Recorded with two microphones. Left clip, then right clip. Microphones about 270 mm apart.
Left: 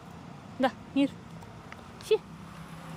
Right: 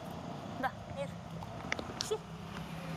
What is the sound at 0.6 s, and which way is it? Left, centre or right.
Speech, left.